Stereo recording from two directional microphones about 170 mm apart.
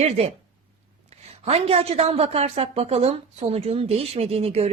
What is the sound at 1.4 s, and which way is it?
A woman's voice, 35° right (ahead or behind).